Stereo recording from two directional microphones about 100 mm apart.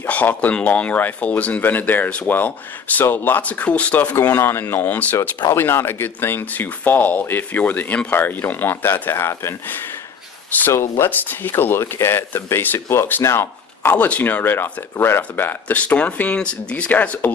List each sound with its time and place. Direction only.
0.0 s speech: 15° left (ahead or behind)